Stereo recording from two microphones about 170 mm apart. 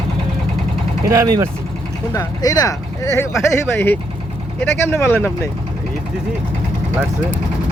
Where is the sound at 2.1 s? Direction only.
20° left (ahead or behind).